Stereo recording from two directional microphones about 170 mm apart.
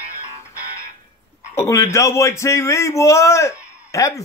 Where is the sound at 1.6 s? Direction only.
15° left (ahead or behind).